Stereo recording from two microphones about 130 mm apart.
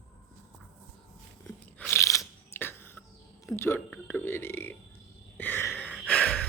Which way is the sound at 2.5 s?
15° left (ahead or behind).